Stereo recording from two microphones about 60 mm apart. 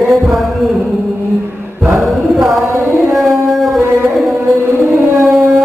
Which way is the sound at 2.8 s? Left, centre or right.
Right.